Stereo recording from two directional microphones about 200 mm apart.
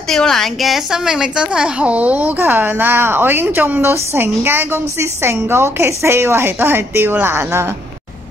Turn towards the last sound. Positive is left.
turn(degrees=-10)  # may be behind; listen again after turning